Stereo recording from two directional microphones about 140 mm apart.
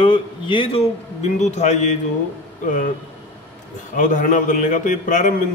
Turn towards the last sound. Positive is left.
turn(degrees=65)  # may be behind; listen again after turning